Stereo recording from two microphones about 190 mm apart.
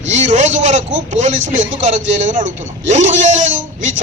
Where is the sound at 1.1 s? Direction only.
40° right (ahead or behind).